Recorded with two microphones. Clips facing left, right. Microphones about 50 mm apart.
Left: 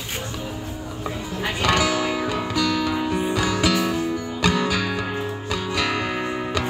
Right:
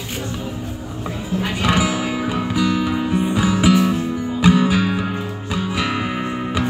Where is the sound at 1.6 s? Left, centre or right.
Centre.